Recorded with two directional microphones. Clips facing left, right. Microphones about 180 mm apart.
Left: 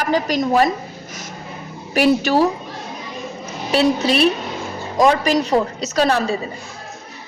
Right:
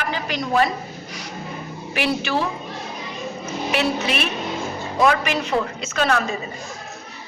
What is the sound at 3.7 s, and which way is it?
A woman's voice, 35° left (ahead or behind).